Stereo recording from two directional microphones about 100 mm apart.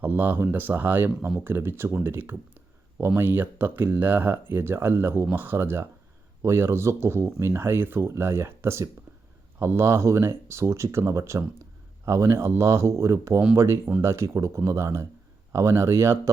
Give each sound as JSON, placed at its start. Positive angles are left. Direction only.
{"t": 0.0, "sound": "speech", "side_deg": -20}